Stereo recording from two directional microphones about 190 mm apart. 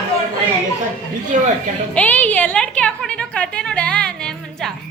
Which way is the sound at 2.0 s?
10° left (ahead or behind).